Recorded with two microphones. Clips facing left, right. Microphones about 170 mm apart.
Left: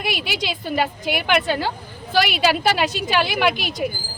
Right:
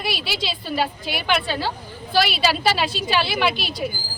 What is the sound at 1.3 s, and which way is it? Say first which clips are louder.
A woman's voice: left 2 dB; 15° left (ahead or behind).